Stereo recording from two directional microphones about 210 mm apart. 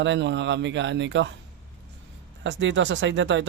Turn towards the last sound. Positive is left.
turn(degrees=-60)  # may be behind; listen again after turning